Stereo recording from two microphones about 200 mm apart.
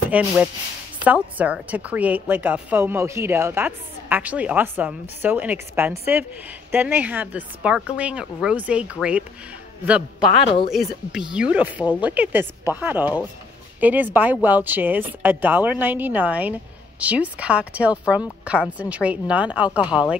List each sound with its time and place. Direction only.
0.1 s a woman's voice: 5° right (ahead or behind)
10.4 s speech: 25° left (ahead or behind)
10.7 s a woman's voice: centre (ahead or behind)